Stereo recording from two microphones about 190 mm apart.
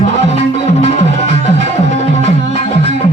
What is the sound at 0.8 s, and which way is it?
Music, 35° left (ahead or behind).